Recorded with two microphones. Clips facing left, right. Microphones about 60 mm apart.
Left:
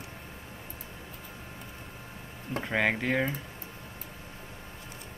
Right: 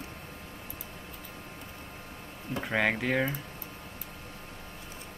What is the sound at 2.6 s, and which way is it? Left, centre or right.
Speech, centre.